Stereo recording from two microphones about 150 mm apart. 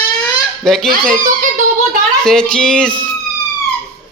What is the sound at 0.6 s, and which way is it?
Speech, 5° left (ahead or behind).